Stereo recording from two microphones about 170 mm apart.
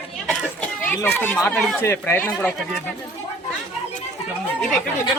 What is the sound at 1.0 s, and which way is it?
Speech, 10° left (ahead or behind).